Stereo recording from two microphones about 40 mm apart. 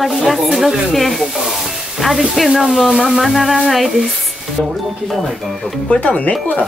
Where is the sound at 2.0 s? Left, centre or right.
Centre.